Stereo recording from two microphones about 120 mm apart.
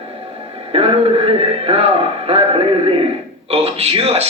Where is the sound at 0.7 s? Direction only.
50° right (ahead or behind).